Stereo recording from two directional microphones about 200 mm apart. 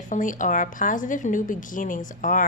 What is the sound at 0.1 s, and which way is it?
A woman's voice, 40° left (ahead or behind).